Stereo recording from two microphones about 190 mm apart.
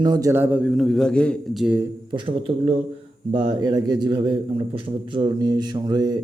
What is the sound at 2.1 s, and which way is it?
A man's voice, 25° right (ahead or behind).